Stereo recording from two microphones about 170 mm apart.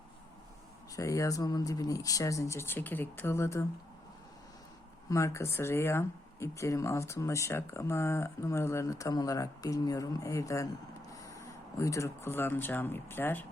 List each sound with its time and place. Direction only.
0.9 s speech: 20° left (ahead or behind)
5.0 s speech: 15° left (ahead or behind)